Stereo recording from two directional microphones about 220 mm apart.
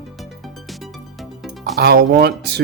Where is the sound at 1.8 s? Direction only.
45° right (ahead or behind).